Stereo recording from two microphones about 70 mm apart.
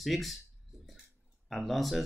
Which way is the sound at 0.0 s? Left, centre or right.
Centre.